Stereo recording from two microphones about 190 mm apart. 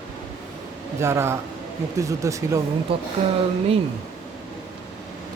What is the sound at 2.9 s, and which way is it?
Speech, 30° right (ahead or behind).